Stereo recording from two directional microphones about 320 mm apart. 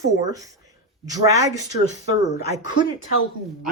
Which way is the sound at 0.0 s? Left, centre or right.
Centre.